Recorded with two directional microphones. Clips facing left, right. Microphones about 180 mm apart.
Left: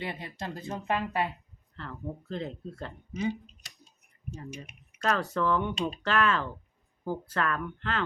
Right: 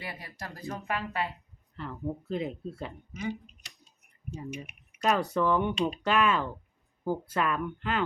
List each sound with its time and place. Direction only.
0.0 s speech: 25° left (ahead or behind)
1.7 s speech: 10° right (ahead or behind)
3.1 s speech: 30° left (ahead or behind)
4.9 s speech: 15° right (ahead or behind)